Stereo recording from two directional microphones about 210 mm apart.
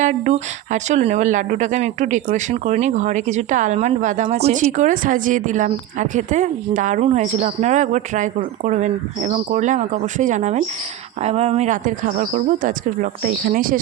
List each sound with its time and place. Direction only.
0.0 s speech: 35° right (ahead or behind)